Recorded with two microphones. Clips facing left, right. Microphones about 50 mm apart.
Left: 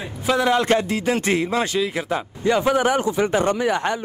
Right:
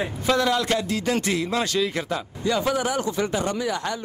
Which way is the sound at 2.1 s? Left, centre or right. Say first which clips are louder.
Left 4 dB; left.